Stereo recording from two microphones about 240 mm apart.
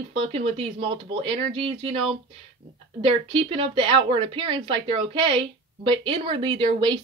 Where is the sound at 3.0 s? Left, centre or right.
Right.